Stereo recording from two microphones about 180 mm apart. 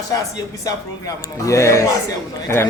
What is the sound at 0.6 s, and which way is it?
Speech, 20° left (ahead or behind).